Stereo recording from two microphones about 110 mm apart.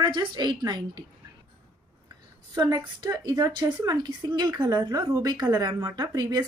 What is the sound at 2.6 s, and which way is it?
A woman's voice, 35° right (ahead or behind).